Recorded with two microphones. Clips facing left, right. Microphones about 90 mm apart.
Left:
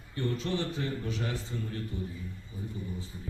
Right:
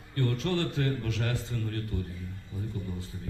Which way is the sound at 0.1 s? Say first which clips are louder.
Right 2 dB; 65° right (ahead or behind).